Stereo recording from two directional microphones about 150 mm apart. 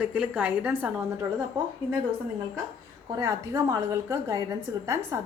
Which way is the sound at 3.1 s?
20° right (ahead or behind).